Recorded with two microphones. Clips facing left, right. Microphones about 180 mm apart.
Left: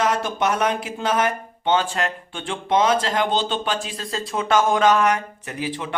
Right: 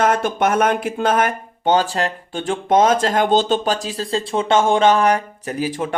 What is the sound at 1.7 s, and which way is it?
Speech, 35° right (ahead or behind).